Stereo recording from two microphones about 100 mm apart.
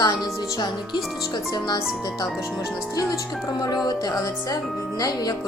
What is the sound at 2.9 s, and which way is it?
Speech, 40° left (ahead or behind).